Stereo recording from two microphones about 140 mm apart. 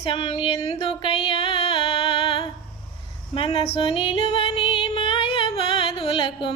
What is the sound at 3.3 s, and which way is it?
Female singing, 40° left (ahead or behind).